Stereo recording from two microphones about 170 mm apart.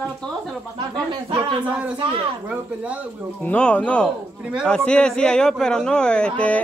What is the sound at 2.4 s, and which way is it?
Speech, 10° right (ahead or behind).